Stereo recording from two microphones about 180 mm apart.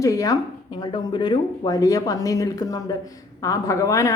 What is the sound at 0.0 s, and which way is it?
Speech, 20° left (ahead or behind).